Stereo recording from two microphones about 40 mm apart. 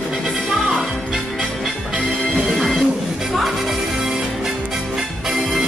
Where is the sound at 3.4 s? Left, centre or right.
Centre.